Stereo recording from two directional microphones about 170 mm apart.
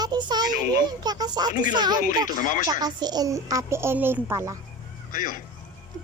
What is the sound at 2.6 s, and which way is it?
Speech, 25° right (ahead or behind).